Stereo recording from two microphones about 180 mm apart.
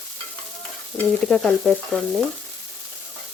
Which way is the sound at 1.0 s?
5° left (ahead or behind).